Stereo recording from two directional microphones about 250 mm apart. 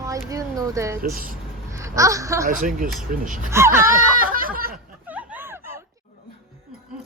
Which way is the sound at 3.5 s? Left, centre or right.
Centre.